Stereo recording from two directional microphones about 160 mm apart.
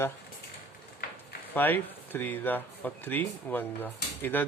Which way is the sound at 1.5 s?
10° left (ahead or behind).